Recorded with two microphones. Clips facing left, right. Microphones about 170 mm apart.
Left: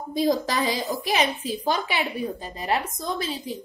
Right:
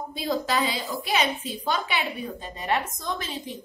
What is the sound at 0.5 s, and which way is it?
A woman's voice, 40° left (ahead or behind).